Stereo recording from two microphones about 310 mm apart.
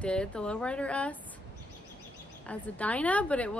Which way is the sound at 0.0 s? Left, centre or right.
Centre.